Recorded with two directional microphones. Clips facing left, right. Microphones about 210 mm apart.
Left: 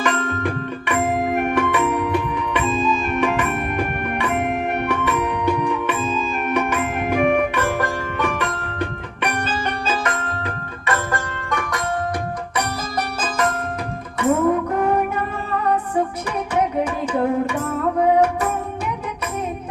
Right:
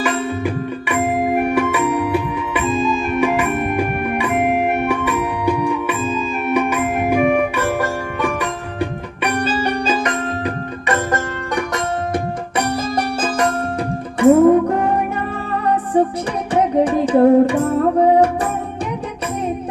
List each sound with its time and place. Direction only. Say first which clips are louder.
0.0 s music: right 2 dB; 10° right (ahead or behind)
14.2 s music: right 8 dB; 30° right (ahead or behind)
16.6 s music: right 7 dB; 30° right (ahead or behind)